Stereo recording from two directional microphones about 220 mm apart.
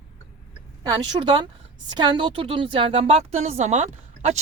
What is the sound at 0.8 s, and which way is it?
A woman's voice, 20° right (ahead or behind).